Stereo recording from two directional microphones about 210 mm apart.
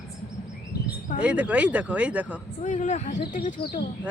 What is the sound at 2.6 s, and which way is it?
Speech, 35° left (ahead or behind).